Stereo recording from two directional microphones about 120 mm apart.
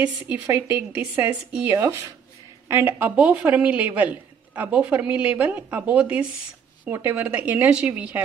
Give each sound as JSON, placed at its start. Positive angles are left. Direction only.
{"t": 0.0, "sound": "a woman's voice", "side_deg": -15}
{"t": 1.1, "sound": "a woman's voice", "side_deg": -25}